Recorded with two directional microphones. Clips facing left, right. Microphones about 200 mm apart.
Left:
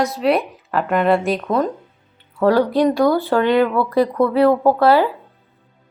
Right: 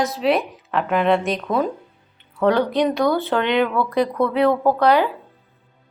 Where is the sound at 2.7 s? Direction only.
20° right (ahead or behind).